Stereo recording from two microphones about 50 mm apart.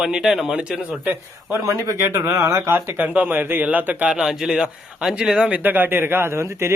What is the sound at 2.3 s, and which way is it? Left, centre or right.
Speech, right.